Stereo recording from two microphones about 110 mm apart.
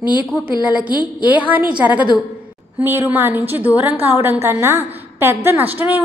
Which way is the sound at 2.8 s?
20° right (ahead or behind).